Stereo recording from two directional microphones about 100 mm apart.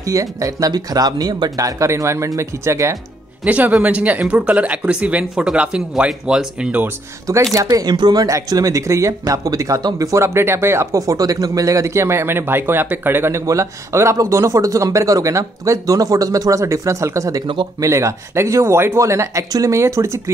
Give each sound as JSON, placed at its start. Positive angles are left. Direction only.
{"t": 0.0, "sound": "speech", "side_deg": -35}
{"t": 3.4, "sound": "speech", "side_deg": -15}
{"t": 7.5, "sound": "speech", "side_deg": -40}